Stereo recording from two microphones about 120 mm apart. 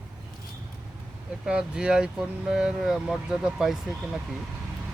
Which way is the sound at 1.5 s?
5° right (ahead or behind).